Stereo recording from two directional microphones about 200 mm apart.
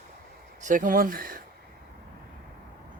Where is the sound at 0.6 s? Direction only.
40° right (ahead or behind).